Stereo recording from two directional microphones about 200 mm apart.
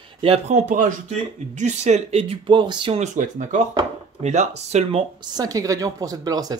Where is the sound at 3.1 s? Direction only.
40° right (ahead or behind).